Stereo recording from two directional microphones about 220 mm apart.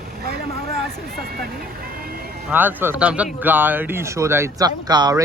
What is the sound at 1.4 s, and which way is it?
Vehicle, 45° right (ahead or behind).